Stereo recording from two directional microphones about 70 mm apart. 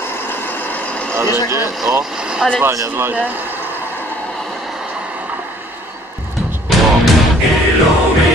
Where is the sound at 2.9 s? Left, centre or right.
Right.